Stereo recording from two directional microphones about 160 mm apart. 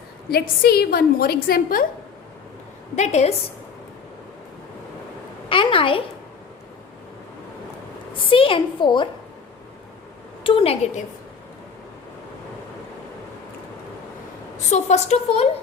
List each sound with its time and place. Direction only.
0.3 s a woman's voice: 75° left (ahead or behind)
2.9 s a woman's voice: 45° left (ahead or behind)
5.5 s a sound: 35° left (ahead or behind)
8.3 s a sound: 35° left (ahead or behind)
10.4 s a woman's voice: 35° left (ahead or behind)
14.7 s a woman's voice: 45° left (ahead or behind)